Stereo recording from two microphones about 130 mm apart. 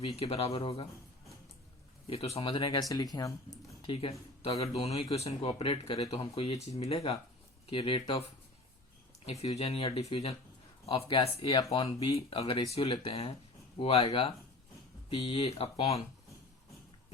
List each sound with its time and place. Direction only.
0.0 s speech: 50° left (ahead or behind)
2.0 s speech: 50° left (ahead or behind); by 3.6 s 25° left (ahead or behind)
3.8 s speech: 45° left (ahead or behind)